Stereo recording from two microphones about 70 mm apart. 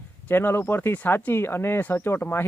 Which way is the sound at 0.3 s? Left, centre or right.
Left.